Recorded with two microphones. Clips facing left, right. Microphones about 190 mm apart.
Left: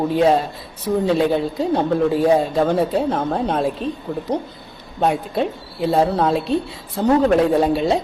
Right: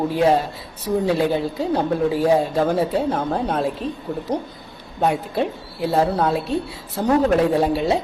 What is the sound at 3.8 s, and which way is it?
Speech, 25° left (ahead or behind).